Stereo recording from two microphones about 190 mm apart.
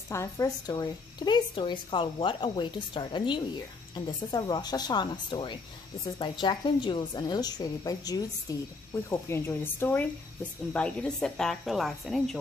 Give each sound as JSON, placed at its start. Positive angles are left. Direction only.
{"t": 0.1, "sound": "a woman's voice", "side_deg": 15}